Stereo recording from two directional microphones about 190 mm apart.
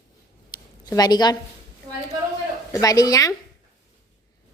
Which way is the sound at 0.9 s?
20° left (ahead or behind).